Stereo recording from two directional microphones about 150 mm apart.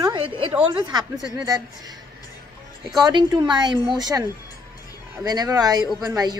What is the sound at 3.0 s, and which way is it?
A woman's voice, 30° right (ahead or behind).